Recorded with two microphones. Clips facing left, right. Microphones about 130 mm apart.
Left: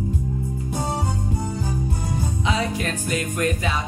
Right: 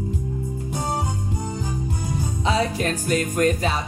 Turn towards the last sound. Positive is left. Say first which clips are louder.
# right 3 dB
turn(degrees=-40)  # may be behind; listen again after turning